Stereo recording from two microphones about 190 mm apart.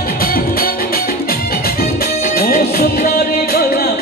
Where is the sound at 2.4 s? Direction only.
50° left (ahead or behind).